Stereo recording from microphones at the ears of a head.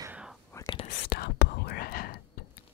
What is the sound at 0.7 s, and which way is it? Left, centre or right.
Whispering, left.